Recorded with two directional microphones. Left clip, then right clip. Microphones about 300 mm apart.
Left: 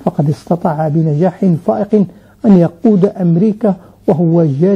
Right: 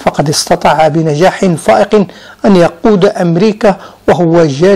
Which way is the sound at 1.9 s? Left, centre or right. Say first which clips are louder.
Right 5 dB; right.